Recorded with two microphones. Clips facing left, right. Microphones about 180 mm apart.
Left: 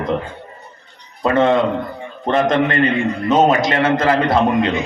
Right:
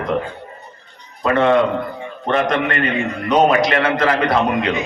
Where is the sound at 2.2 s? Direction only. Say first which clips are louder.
Left 2 dB; 30° left (ahead or behind).